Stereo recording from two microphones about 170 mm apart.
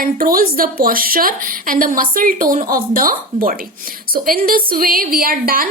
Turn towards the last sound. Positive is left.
turn(degrees=-55)  # may be behind; listen again after turning